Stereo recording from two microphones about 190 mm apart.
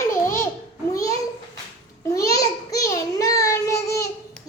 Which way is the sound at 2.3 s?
20° left (ahead or behind).